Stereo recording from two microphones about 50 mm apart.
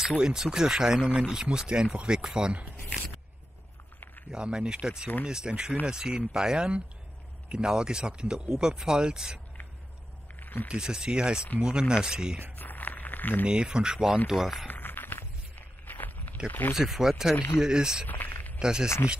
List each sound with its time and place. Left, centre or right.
0.2 s speech: centre
4.3 s speech: centre
10.4 s a sound: left
10.7 s speech: centre
12.5 s a sound: left
13.5 s speech: centre
14.2 s speech: centre
14.7 s walk: left
16.4 s speech: left
16.7 s speech: centre
18.0 s speech: left
18.6 s speech: centre